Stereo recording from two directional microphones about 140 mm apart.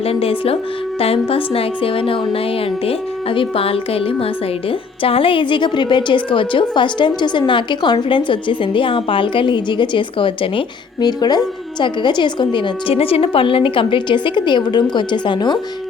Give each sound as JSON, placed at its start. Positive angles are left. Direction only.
{"t": 0.0, "sound": "a woman's voice", "side_deg": 45}